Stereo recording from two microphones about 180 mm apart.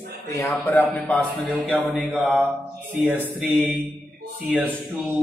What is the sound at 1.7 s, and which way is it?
Mantra, centre (ahead or behind).